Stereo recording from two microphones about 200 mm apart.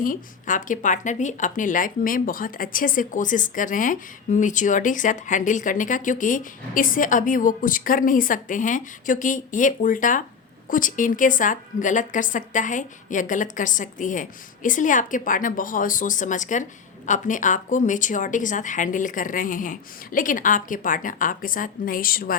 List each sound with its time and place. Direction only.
0.0 s a woman's voice: 40° left (ahead or behind)